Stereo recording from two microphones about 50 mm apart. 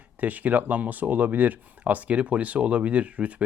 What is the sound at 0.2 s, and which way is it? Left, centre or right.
Speech, right.